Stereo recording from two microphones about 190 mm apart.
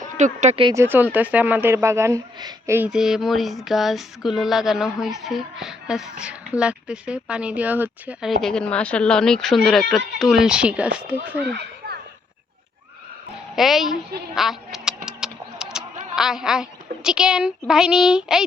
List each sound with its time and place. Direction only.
0.2 s speech: 40° right (ahead or behind)
0.6 s speech: 15° right (ahead or behind)
13.6 s speech: centre (ahead or behind)
14.3 s duck: centre (ahead or behind)